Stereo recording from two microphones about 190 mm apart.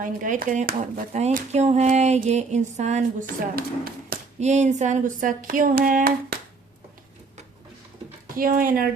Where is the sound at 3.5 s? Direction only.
50° right (ahead or behind).